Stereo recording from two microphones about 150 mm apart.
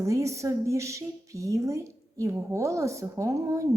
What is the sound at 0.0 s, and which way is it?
A woman's voice, 20° right (ahead or behind).